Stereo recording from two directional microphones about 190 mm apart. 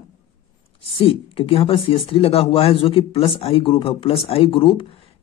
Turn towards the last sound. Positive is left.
turn(degrees=25)  # may be behind; listen again after turning